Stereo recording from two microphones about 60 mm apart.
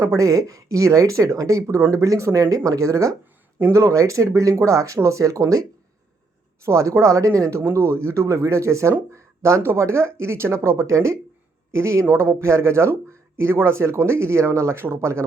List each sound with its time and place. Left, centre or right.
0.0 s speech: right
3.6 s speech: right
6.7 s speech: right